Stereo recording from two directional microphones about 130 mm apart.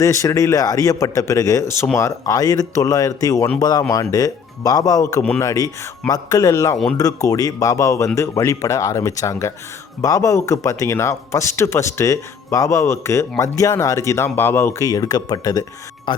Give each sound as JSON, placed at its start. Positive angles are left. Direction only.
{"t": 0.0, "sound": "a man's voice", "side_deg": 25}